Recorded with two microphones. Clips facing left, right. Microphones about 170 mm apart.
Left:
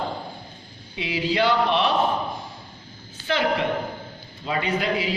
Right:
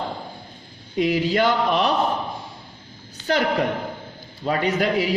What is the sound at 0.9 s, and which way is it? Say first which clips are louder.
Speech: right 4 dB; 45° right (ahead or behind).